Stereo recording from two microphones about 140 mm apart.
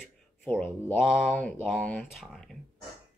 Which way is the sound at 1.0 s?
5° right (ahead or behind).